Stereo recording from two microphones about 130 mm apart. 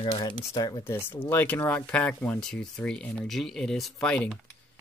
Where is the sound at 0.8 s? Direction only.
15° left (ahead or behind).